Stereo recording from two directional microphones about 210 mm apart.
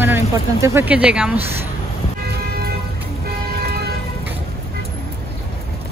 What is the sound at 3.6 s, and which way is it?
Vehicle, 50° right (ahead or behind).